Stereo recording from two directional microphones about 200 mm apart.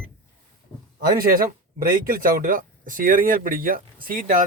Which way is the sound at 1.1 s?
45° right (ahead or behind).